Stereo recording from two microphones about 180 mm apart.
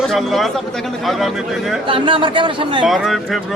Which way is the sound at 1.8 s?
30° right (ahead or behind).